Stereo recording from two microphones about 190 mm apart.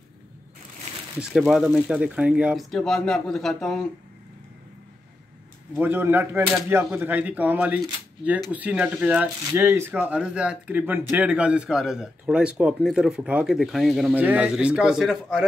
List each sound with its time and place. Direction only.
1.1 s speech: centre (ahead or behind)
5.8 s speech: 10° right (ahead or behind)